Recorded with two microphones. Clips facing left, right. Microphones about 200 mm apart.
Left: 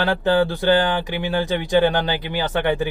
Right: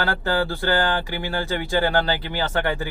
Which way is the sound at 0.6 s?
20° left (ahead or behind).